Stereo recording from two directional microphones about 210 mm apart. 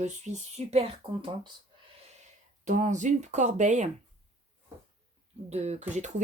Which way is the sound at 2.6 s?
35° right (ahead or behind).